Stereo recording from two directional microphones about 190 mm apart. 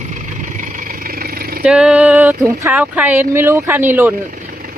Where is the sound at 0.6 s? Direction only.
50° right (ahead or behind).